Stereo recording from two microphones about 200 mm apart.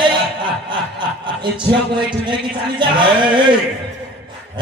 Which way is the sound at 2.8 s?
25° right (ahead or behind).